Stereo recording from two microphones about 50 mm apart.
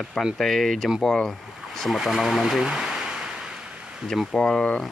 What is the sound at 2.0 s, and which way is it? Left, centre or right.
Speech, centre.